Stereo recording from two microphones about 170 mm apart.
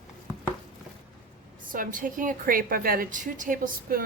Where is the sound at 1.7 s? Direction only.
55° right (ahead or behind).